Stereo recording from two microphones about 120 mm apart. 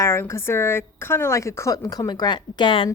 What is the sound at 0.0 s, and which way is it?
A woman's voice, 20° left (ahead or behind).